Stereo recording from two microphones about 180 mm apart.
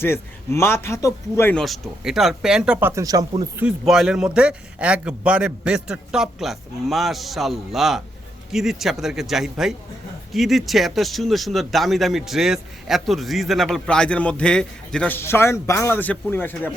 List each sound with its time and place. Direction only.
0.0 s speech: 15° left (ahead or behind)
1.6 s speech: centre (ahead or behind)
2.9 s speech: 20° right (ahead or behind)
3.6 s speech: 5° right (ahead or behind); by 16.7 s 10° left (ahead or behind)